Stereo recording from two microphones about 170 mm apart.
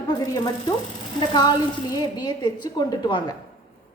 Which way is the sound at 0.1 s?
25° left (ahead or behind).